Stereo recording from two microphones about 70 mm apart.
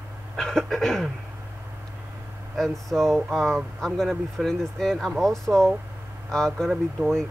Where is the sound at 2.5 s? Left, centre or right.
Centre.